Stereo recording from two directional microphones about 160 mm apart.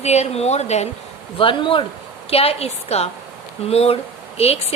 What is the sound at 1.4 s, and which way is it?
A woman's voice, 30° left (ahead or behind).